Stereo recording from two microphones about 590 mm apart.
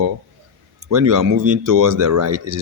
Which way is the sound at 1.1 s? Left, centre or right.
Right.